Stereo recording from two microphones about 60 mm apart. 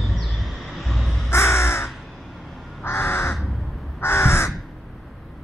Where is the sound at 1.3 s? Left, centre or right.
Left.